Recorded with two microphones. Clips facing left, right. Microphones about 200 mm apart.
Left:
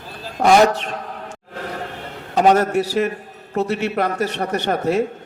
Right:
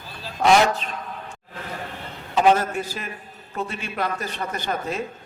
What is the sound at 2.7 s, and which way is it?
A man's voice, 75° left (ahead or behind).